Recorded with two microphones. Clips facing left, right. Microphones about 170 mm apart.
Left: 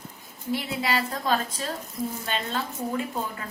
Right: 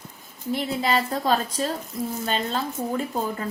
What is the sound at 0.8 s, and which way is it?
A woman's voice, 35° right (ahead or behind).